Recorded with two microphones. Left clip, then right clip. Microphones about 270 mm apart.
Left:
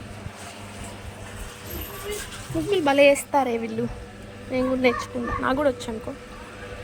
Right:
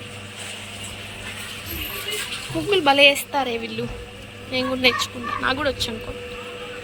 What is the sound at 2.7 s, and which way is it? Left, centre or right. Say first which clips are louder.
A woman's voice: right 2 dB; centre.